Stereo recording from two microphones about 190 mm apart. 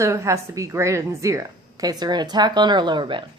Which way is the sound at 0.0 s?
15° right (ahead or behind).